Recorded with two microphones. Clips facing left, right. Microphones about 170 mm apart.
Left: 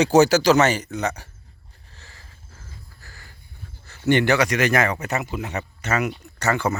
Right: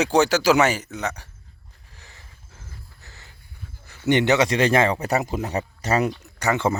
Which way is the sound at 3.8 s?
15° right (ahead or behind).